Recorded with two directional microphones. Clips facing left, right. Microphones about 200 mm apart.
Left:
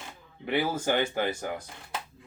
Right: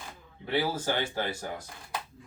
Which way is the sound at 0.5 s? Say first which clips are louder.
Left 2 dB; 20° left (ahead or behind).